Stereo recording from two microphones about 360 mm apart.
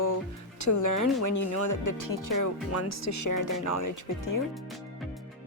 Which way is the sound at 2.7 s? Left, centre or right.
Left.